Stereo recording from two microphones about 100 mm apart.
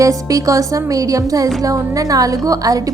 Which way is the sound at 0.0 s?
35° right (ahead or behind).